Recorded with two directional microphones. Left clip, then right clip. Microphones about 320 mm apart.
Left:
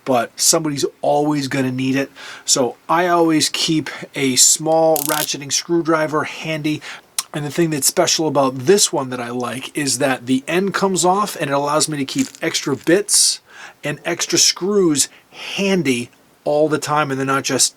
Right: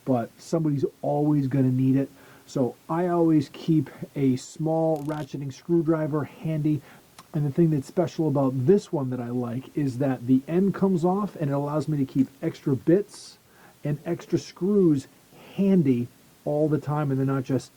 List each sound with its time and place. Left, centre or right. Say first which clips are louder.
0.0 s speech: left 11 dB; centre
1.0 s speech: left 10 dB; left
1.3 s speech: left 5 dB; centre
4.6 s speech: left 7 dB; centre
4.9 s speech: left 11 dB; centre
5.6 s speech: left 6 dB; centre
16.4 s speech: left 9 dB; left
16.7 s speech: left 10 dB; centre